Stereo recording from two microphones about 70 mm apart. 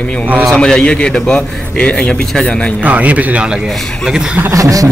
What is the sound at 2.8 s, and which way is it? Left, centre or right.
Speech, right.